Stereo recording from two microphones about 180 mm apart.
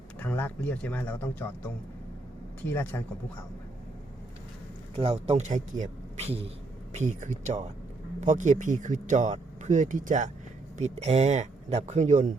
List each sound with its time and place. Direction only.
0.2 s speech: 10° left (ahead or behind)
4.9 s speech: 35° right (ahead or behind)